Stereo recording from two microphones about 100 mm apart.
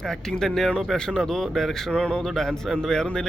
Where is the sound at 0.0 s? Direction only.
5° left (ahead or behind).